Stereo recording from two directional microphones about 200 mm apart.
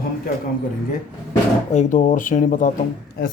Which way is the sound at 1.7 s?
40° left (ahead or behind).